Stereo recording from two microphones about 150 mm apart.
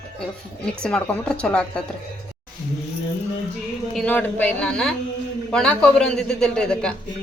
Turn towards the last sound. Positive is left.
turn(degrees=5)  # may be behind; listen again after turning